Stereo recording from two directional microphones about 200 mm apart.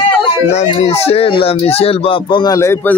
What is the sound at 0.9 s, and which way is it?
Speech, 30° left (ahead or behind).